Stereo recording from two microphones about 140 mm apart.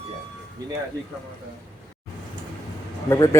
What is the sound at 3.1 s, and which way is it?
Speech, 20° left (ahead or behind).